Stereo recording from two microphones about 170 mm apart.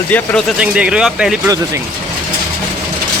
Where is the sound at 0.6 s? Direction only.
5° right (ahead or behind).